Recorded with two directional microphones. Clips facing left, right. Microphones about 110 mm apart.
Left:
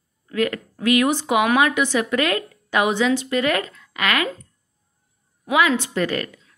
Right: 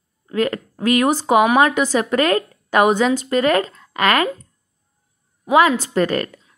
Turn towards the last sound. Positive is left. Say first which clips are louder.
# right 4 dB
turn(degrees=-40)  # may be behind; listen again after turning